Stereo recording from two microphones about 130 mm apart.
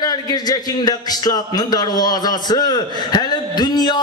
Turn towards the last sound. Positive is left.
turn(degrees=35)  # may be behind; listen again after turning